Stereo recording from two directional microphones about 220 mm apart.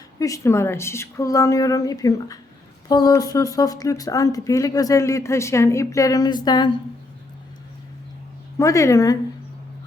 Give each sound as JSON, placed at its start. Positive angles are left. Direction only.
{"t": 0.2, "sound": "speech", "side_deg": 15}
{"t": 8.5, "sound": "speech", "side_deg": 15}